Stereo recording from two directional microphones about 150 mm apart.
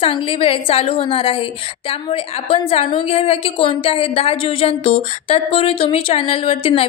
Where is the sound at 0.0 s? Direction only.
35° left (ahead or behind).